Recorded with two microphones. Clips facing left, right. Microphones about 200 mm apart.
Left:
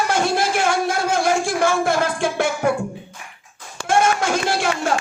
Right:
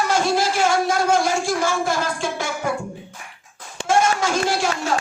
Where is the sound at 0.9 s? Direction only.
55° left (ahead or behind).